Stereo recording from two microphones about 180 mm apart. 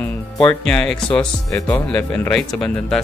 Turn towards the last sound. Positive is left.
turn(degrees=5)  # may be behind; listen again after turning